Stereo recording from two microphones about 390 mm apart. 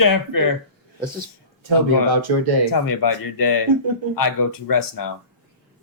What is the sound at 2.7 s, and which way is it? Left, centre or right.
Speech, left.